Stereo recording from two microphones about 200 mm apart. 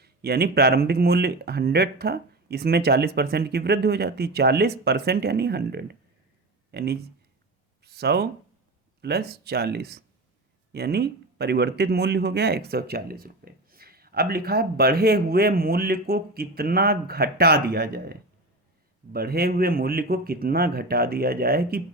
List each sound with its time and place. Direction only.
0.0 s speech: 50° right (ahead or behind)